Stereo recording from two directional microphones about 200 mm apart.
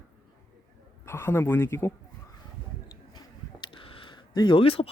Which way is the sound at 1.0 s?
10° left (ahead or behind).